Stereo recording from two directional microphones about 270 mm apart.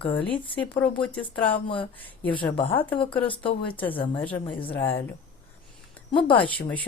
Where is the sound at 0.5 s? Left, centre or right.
Centre.